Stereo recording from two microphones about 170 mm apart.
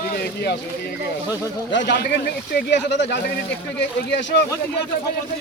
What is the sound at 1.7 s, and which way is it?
Speech, 90° left.